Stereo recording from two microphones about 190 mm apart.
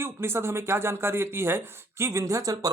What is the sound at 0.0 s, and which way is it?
Speech, 15° right (ahead or behind).